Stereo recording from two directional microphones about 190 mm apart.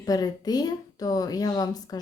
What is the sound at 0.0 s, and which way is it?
Speech, 20° left (ahead or behind).